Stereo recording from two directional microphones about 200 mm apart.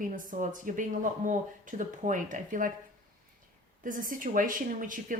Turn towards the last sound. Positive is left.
turn(degrees=-40)  # may be behind; listen again after turning